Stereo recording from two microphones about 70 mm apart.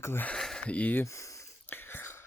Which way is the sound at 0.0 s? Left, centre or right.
Left.